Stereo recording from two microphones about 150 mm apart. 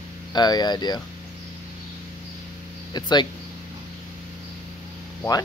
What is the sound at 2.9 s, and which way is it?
Speech, 30° left (ahead or behind).